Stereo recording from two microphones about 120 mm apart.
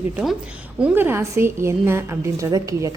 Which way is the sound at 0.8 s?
15° right (ahead or behind).